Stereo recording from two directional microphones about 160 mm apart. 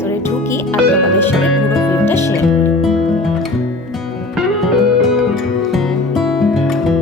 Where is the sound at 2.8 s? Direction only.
Centre (ahead or behind).